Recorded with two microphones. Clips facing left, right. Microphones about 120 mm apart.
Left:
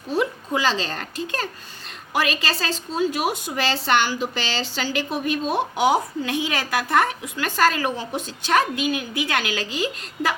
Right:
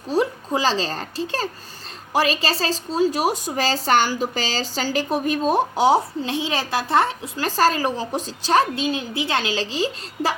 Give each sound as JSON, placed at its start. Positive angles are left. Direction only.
{"t": 0.1, "sound": "a woman's voice", "side_deg": -35}